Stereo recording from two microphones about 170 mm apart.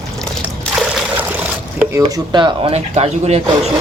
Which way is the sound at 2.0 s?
25° right (ahead or behind).